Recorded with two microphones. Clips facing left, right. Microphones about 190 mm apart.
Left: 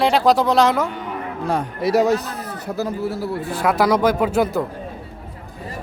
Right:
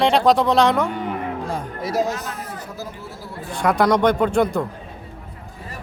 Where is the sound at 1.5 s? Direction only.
70° left (ahead or behind).